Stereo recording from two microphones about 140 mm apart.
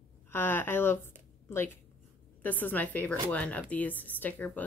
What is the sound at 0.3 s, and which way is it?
Speech, 15° left (ahead or behind).